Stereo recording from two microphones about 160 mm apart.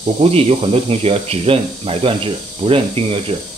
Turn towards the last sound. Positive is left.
turn(degrees=-35)  # may be behind; listen again after turning